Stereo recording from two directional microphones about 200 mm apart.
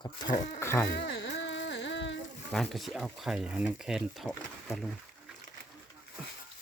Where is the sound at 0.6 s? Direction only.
10° left (ahead or behind).